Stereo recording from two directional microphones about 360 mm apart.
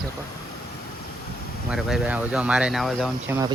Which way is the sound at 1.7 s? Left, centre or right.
Centre.